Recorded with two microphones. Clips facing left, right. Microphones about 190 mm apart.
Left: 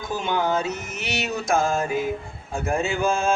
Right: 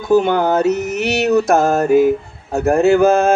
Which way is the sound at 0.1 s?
60° right (ahead or behind).